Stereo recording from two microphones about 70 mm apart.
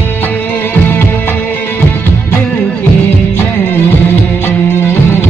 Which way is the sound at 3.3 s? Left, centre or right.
Left.